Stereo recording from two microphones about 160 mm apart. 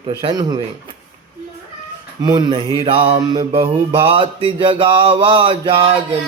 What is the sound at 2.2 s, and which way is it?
Speech, 25° right (ahead or behind).